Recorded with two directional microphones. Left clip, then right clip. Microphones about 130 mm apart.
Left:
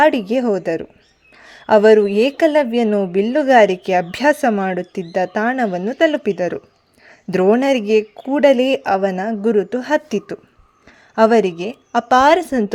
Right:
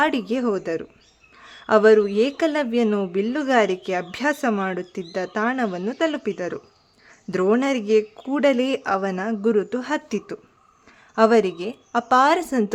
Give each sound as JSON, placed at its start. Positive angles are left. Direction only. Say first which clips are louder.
{"t": 0.0, "sound": "a woman's voice", "louder": "left 7 dB", "side_deg": 25}